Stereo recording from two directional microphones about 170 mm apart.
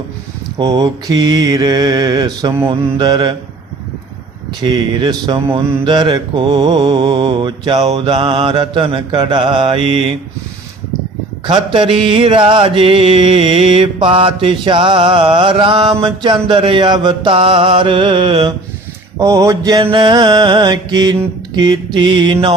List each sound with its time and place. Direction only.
0.6 s mantra: 20° right (ahead or behind)
4.6 s mantra: 25° right (ahead or behind)
11.4 s mantra: 30° right (ahead or behind)
19.2 s mantra: 20° right (ahead or behind)